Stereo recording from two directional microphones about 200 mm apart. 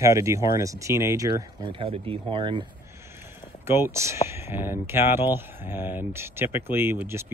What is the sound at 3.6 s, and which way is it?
Speech, 10° right (ahead or behind).